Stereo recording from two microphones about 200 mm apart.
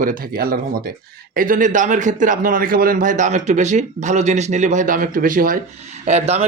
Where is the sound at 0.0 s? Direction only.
45° right (ahead or behind).